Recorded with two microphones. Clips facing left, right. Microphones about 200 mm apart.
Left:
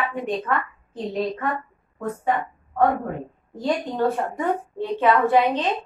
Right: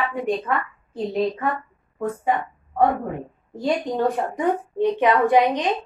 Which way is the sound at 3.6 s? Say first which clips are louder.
Right 1 dB; 15° right (ahead or behind).